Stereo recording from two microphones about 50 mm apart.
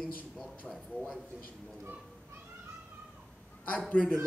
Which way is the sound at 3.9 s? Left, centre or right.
Left.